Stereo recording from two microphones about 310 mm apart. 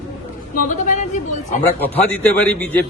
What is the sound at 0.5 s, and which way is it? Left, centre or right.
A woman's voice, left.